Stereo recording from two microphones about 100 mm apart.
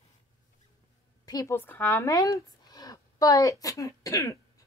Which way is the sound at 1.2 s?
40° left (ahead or behind).